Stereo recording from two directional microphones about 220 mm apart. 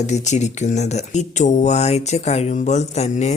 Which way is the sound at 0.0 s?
30° left (ahead or behind).